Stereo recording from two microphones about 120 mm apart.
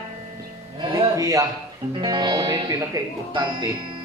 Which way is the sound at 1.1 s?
30° right (ahead or behind).